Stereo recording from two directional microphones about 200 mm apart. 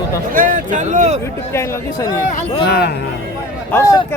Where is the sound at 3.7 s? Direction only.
15° left (ahead or behind).